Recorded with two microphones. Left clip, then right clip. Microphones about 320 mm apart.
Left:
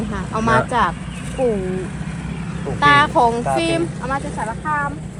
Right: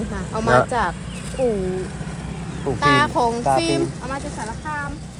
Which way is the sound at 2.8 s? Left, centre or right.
Centre.